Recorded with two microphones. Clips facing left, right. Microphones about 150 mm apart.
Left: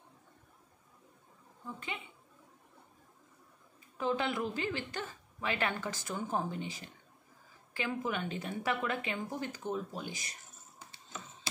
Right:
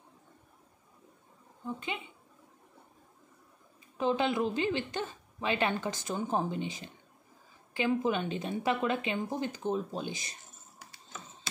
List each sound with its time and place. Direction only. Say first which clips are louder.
4.0 s a woman's voice: right 4 dB; 20° right (ahead or behind)